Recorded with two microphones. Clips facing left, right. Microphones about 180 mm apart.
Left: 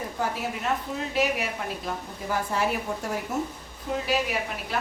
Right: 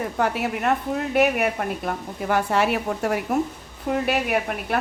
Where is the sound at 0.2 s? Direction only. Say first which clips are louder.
Right 6 dB; 65° right (ahead or behind).